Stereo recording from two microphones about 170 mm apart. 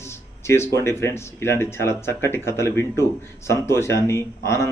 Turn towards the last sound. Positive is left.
turn(degrees=15)  # may be behind; listen again after turning